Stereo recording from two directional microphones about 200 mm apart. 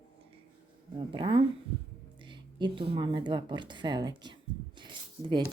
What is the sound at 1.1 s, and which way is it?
A woman's voice, 25° right (ahead or behind).